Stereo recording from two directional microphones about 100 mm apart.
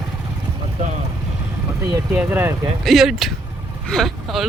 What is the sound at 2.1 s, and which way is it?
Speech, 15° right (ahead or behind).